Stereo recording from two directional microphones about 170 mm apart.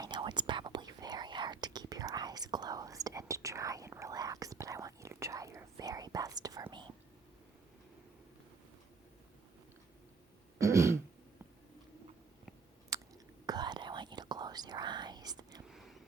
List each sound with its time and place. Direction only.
0.0 s whispering: 25° right (ahead or behind)
10.6 s throat clearing: 15° right (ahead or behind)
13.4 s whispering: 25° right (ahead or behind)
15.6 s a sound: centre (ahead or behind)